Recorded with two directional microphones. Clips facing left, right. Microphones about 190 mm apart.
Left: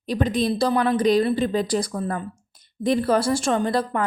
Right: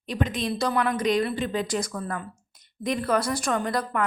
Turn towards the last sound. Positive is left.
turn(degrees=30)  # may be behind; listen again after turning